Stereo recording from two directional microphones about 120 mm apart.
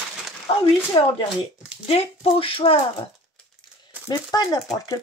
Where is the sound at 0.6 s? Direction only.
50° left (ahead or behind).